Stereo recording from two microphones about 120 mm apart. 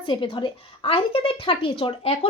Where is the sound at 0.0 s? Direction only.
45° left (ahead or behind).